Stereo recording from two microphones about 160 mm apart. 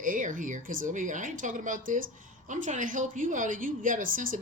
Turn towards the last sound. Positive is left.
turn(degrees=-60)  # may be behind; listen again after turning